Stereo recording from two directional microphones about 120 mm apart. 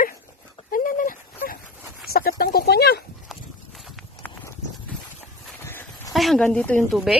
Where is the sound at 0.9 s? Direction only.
90° left.